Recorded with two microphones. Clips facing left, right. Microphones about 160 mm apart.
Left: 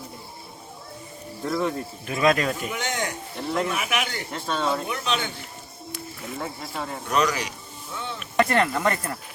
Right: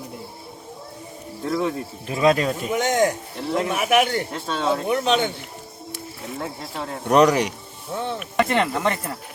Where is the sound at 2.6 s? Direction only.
40° right (ahead or behind).